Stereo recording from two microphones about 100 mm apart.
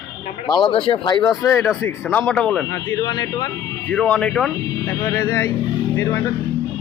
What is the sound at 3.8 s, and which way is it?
Speech, 10° left (ahead or behind).